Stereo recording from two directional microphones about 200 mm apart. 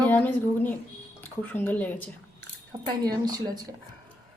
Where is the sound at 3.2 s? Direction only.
20° right (ahead or behind).